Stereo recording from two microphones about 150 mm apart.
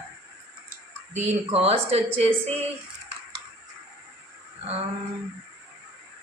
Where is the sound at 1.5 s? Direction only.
40° right (ahead or behind).